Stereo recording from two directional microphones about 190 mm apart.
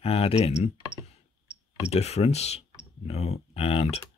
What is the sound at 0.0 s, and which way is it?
Speech, 30° left (ahead or behind).